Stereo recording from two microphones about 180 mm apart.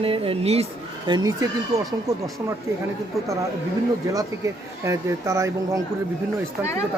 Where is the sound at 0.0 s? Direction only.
30° right (ahead or behind).